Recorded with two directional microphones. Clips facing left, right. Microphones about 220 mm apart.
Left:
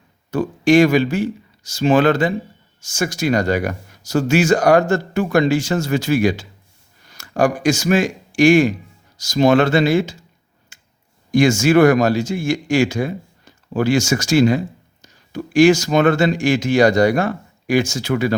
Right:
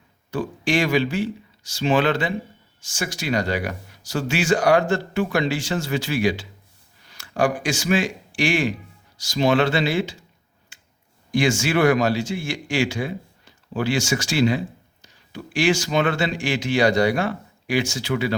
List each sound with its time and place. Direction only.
0.3 s speech: 45° left (ahead or behind)
10.7 s finger snapping: 45° left (ahead or behind)
11.3 s speech: 45° left (ahead or behind)